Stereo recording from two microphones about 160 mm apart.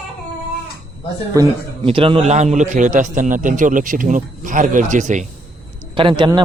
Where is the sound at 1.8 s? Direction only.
35° right (ahead or behind); by 5.2 s 50° right (ahead or behind).